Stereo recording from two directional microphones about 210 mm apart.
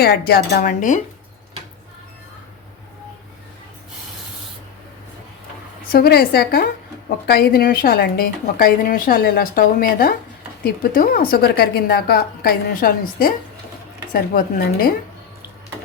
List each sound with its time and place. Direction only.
0.0 s a woman's voice: 50° left (ahead or behind)
5.9 s a woman's voice: 45° left (ahead or behind)